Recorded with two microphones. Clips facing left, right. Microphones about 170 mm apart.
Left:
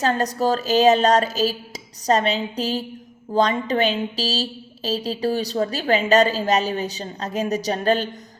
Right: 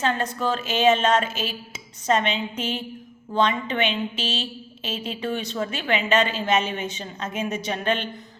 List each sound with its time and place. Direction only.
0.0 s speech: 40° left (ahead or behind)